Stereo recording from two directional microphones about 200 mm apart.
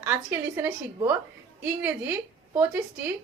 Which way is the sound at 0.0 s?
10° right (ahead or behind).